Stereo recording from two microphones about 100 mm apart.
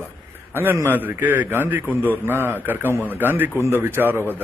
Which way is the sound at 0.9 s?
20° right (ahead or behind).